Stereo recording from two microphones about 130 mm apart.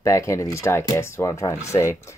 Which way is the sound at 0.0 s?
25° left (ahead or behind).